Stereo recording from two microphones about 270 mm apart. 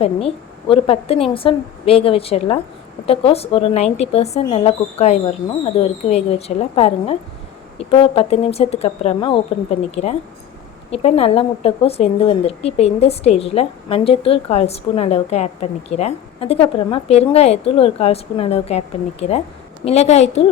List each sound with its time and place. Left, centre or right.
0.0 s speech: left